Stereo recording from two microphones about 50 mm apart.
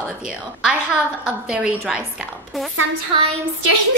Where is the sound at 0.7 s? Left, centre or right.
Right.